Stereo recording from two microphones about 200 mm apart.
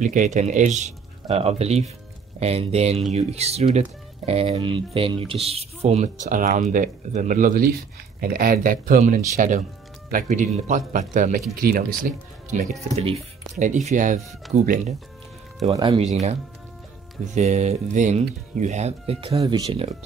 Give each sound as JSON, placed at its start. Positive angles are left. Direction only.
{"t": 0.0, "sound": "speech", "side_deg": -40}
{"t": 15.7, "sound": "speech", "side_deg": -15}
{"t": 16.0, "sound": "speech", "side_deg": -35}